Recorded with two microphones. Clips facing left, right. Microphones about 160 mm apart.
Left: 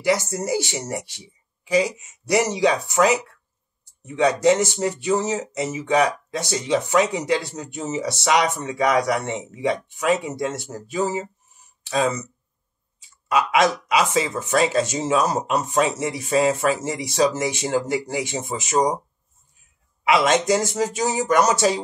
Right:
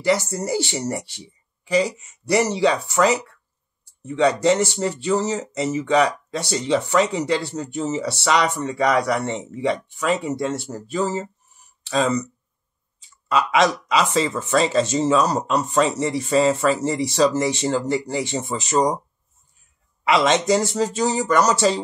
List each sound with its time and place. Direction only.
0.5 s speech: 15° left (ahead or behind)
13.3 s speech: 15° left (ahead or behind)
20.1 s speech: 10° left (ahead or behind)